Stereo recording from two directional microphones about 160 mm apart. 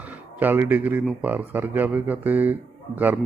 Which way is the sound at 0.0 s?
10° right (ahead or behind).